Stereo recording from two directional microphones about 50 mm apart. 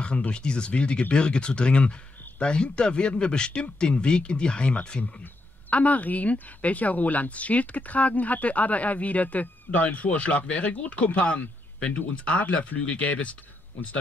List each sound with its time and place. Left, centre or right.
0.3 s speech: centre